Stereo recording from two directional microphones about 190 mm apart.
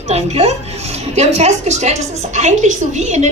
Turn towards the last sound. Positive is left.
turn(degrees=-35)  # may be behind; listen again after turning